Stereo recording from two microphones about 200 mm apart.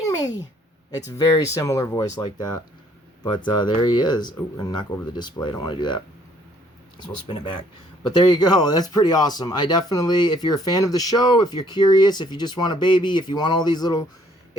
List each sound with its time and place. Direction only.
0.0 s a sound: 20° left (ahead or behind)
0.9 s speech: 20° left (ahead or behind)
3.3 s speech: 20° left (ahead or behind)
7.0 s speech: 25° left (ahead or behind)